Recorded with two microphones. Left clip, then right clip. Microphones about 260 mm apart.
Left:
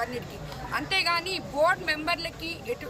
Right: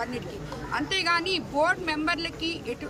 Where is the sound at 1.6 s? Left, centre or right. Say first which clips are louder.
Left 2 dB; centre.